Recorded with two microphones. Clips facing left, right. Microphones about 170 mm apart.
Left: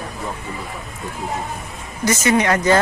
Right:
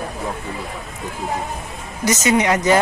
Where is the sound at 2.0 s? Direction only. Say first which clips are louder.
Even; 15° right (ahead or behind).